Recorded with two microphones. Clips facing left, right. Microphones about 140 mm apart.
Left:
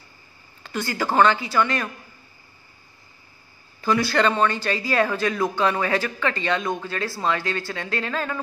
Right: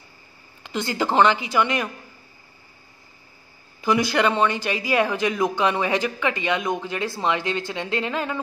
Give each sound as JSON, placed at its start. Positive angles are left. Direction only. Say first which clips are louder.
{"t": 0.7, "sound": "speech", "louder": "right 1 dB", "side_deg": -20}
{"t": 3.8, "sound": "speech", "louder": "even", "side_deg": -15}